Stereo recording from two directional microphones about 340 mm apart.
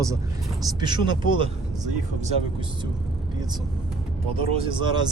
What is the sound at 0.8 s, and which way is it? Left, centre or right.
Speech, centre.